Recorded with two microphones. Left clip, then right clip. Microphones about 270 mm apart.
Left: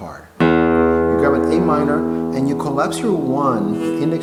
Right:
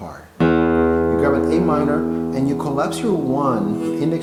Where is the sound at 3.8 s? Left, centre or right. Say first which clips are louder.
Left 2 dB; centre.